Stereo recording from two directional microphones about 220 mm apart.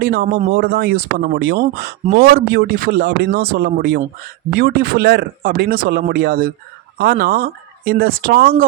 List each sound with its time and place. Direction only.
0.0 s speech: 45° right (ahead or behind)